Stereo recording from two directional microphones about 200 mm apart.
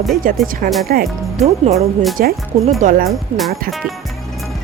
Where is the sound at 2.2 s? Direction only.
45° right (ahead or behind).